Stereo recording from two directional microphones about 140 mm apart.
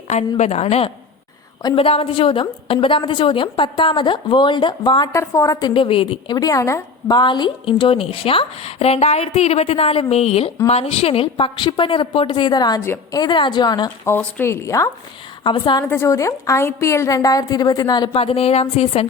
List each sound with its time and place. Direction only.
0.1 s a woman's voice: 55° left (ahead or behind); by 5.0 s 35° left (ahead or behind)
5.1 s a woman's voice: 20° left (ahead or behind)
7.2 s a woman's voice: 35° left (ahead or behind)
12.8 s a woman's voice: 20° left (ahead or behind)
13.1 s a woman's voice: 35° left (ahead or behind)
14.0 s a woman's voice: 15° left (ahead or behind)
15.4 s a woman's voice: 35° left (ahead or behind)
15.8 s a woman's voice: 20° left (ahead or behind)
18.1 s a woman's voice: 45° left (ahead or behind)